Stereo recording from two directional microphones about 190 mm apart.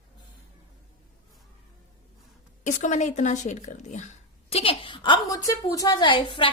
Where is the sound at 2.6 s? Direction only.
40° left (ahead or behind).